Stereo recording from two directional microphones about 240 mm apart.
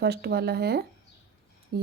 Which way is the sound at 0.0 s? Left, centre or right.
Right.